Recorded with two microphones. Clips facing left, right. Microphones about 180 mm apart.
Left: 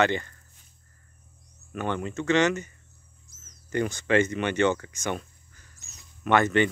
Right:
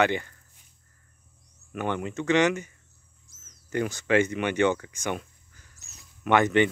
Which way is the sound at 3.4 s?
5° right (ahead or behind).